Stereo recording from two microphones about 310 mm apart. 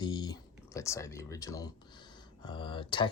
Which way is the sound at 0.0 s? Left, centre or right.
Centre.